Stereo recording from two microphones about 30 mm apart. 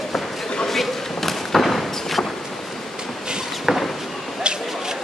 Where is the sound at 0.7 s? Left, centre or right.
Centre.